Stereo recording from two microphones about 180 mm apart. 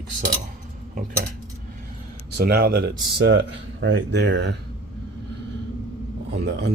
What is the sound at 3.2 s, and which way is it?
Speech, 70° right (ahead or behind).